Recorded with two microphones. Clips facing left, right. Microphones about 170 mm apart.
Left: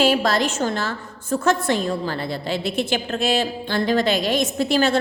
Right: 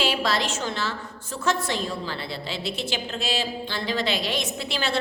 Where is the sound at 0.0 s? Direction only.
45° left (ahead or behind).